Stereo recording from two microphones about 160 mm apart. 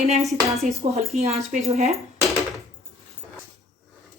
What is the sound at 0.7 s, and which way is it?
Speech, 45° right (ahead or behind).